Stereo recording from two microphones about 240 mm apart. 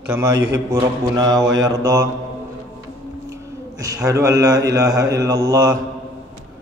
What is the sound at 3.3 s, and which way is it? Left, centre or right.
A man's voice, centre.